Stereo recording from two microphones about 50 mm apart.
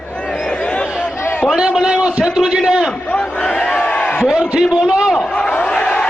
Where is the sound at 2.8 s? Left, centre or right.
Centre.